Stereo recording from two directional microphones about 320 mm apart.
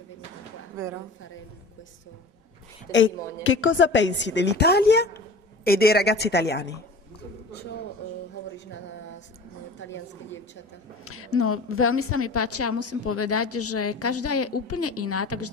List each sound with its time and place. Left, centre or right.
0.8 s a woman's voice: centre
3.4 s a woman's voice: left
9.8 s a woman's voice: left
11.1 s a woman's voice: left